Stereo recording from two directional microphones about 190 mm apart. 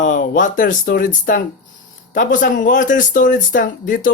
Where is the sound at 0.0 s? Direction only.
45° left (ahead or behind).